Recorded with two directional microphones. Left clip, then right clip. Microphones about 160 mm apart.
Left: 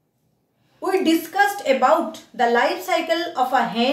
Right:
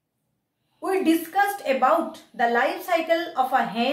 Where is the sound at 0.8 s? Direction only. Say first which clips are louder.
Left 3 dB; 10° left (ahead or behind).